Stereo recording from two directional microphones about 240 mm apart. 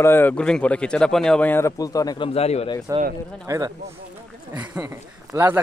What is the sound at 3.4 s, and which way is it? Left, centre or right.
Speech, centre.